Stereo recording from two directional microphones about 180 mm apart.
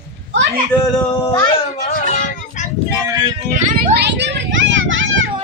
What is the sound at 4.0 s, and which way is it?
Children playing, 70° right (ahead or behind).